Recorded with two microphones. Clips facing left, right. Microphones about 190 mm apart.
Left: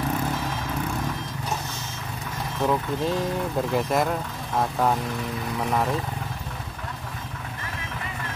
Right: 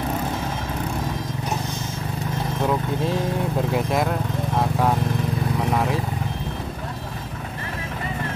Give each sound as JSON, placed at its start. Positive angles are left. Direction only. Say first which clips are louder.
{"t": 2.6, "sound": "speech", "louder": "even", "side_deg": 0}
{"t": 5.7, "sound": "speech", "louder": "even", "side_deg": -5}